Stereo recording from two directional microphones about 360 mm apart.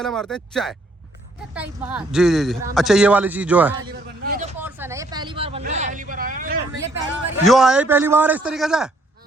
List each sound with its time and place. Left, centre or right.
0.0 s speech: centre
4.2 s speech: right
4.5 s speech: centre; by 7.0 s right
7.4 s speech: centre